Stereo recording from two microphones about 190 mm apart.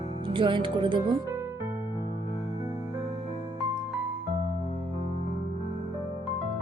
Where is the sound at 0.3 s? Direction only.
25° right (ahead or behind).